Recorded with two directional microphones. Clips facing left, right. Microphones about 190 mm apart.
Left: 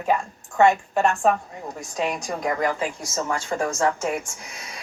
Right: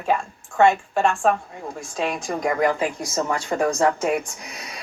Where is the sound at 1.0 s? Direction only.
5° left (ahead or behind).